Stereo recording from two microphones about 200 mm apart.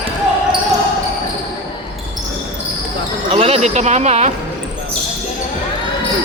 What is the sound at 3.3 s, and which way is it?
Speech, 30° right (ahead or behind).